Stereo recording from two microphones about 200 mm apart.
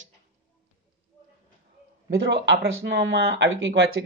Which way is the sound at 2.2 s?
60° right (ahead or behind).